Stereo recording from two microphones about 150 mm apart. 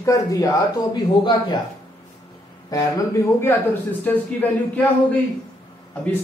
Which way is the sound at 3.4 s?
15° left (ahead or behind).